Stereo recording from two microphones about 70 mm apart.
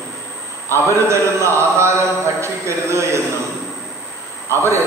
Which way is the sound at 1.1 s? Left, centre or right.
Right.